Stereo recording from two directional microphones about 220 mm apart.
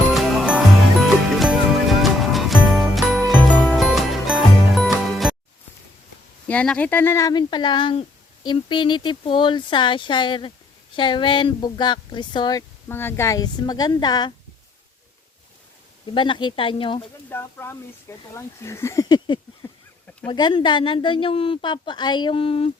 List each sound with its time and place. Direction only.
0.1 s music: centre (ahead or behind)
6.5 s speech: 5° left (ahead or behind)
16.0 s speech: 20° left (ahead or behind)
17.2 s speech: 10° left (ahead or behind)
19.6 s a sound: 10° left (ahead or behind)
20.2 s speech: 20° left (ahead or behind)